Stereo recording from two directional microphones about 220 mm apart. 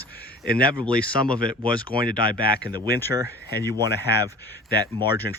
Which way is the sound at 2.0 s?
40° left (ahead or behind).